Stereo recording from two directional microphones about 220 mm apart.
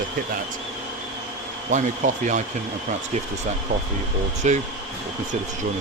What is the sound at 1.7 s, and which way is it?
Speech, 35° right (ahead or behind).